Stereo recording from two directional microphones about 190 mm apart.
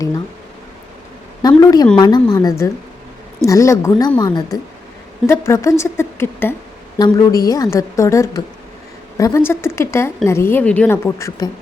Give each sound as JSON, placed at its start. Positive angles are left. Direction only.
{"t": 1.4, "sound": "a woman's voice", "side_deg": 20}